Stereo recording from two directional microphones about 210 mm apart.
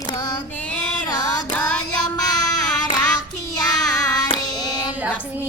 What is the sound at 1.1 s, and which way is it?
Child singing, 20° left (ahead or behind).